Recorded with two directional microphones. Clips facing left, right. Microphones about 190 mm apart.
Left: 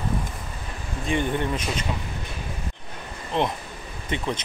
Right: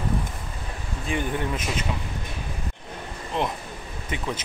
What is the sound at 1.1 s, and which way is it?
Speech, 5° right (ahead or behind).